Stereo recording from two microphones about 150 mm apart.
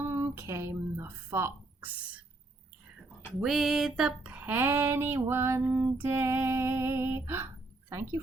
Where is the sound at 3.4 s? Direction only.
Centre (ahead or behind).